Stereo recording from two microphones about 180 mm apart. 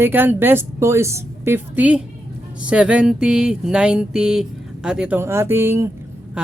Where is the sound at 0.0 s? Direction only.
10° right (ahead or behind).